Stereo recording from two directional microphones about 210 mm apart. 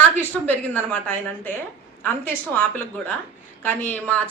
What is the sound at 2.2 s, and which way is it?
A woman's voice, 10° left (ahead or behind).